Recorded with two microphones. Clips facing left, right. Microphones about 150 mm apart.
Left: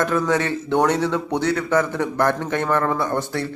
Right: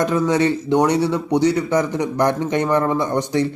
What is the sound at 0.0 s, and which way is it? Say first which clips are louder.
Speech: right 3 dB; 15° right (ahead or behind).